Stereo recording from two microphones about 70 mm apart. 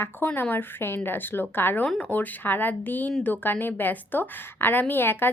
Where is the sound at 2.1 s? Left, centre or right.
Left.